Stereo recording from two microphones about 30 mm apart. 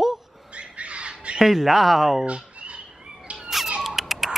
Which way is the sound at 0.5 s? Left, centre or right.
Right.